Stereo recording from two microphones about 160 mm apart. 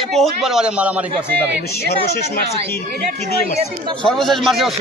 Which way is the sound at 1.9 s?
90° left.